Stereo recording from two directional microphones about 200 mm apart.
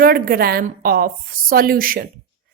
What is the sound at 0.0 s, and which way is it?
A woman's voice, 50° right (ahead or behind).